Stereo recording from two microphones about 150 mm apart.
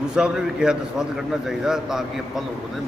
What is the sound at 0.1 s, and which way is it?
Speech, 5° right (ahead or behind).